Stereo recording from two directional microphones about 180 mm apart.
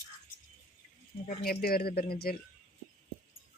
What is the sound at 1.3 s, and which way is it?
Speech, 55° left (ahead or behind).